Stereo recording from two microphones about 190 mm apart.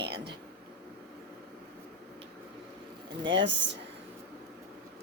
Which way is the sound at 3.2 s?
70° right (ahead or behind).